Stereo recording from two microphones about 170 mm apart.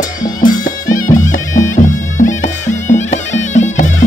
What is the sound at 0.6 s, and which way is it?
Music, 50° left (ahead or behind).